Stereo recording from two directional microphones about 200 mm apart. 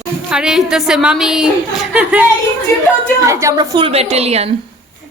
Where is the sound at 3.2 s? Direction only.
15° right (ahead or behind); by 4.5 s 30° right (ahead or behind).